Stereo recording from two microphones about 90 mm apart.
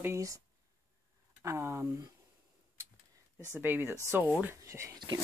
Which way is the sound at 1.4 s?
30° right (ahead or behind).